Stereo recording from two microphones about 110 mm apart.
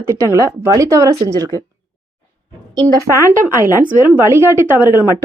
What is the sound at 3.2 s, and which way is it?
Speech, 20° right (ahead or behind).